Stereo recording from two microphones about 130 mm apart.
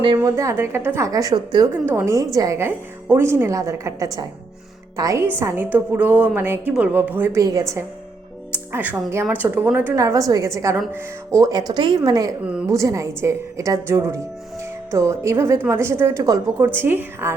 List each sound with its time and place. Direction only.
0.2 s a woman's voice: 25° right (ahead or behind)
1.8 s a woman's voice: 15° right (ahead or behind)
7.4 s a woman's voice: 25° right (ahead or behind)
12.4 s a woman's voice: 10° right (ahead or behind)
12.6 s a woman's voice: 25° right (ahead or behind)
16.6 s a woman's voice: 15° right (ahead or behind)